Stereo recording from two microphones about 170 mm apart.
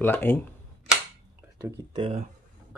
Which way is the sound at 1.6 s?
15° right (ahead or behind).